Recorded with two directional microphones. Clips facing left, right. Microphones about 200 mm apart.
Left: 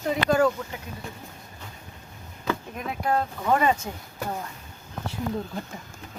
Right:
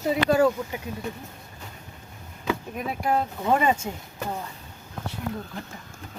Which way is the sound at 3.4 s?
15° right (ahead or behind).